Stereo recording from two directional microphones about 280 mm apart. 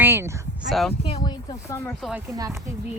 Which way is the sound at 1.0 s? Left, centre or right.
Centre.